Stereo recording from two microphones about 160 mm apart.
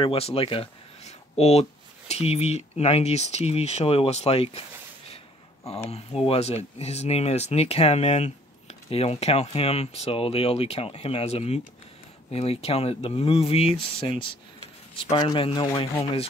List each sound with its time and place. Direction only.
0.0 s speech: 35° left (ahead or behind)
15.0 s speech: 25° left (ahead or behind)